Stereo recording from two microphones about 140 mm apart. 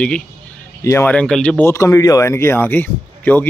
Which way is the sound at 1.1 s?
10° left (ahead or behind).